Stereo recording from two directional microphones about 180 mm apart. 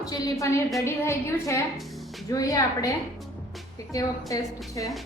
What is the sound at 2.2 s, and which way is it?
Speech, 20° left (ahead or behind).